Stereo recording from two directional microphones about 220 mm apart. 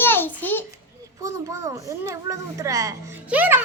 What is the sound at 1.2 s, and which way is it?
A child's voice, 15° right (ahead or behind).